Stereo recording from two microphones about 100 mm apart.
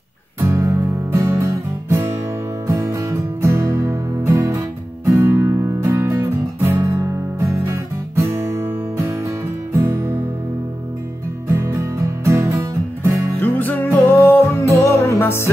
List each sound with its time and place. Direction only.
0.4 s music: 25° right (ahead or behind)
11.5 s music: 30° right (ahead or behind)
13.4 s music: 20° left (ahead or behind)